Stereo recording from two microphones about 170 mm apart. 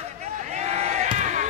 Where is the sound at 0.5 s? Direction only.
40° right (ahead or behind).